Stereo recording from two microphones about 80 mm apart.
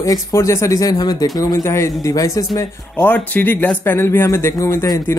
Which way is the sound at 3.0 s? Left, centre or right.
Left.